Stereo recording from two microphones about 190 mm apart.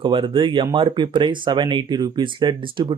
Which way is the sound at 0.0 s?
25° right (ahead or behind).